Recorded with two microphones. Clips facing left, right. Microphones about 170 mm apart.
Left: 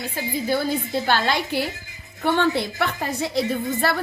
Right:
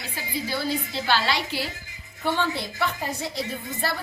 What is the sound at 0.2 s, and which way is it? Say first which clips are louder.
A woman's voice: left 6 dB; 50° left (ahead or behind).